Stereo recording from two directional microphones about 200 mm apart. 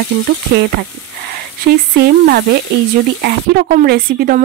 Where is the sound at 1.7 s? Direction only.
50° right (ahead or behind).